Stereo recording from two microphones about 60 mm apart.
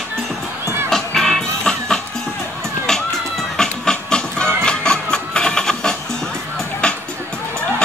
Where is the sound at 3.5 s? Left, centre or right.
Centre.